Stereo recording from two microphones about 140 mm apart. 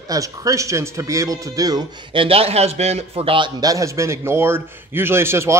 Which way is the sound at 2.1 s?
40° right (ahead or behind).